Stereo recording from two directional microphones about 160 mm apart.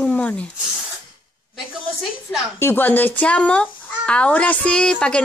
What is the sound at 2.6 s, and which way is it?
A child's voice, 15° left (ahead or behind).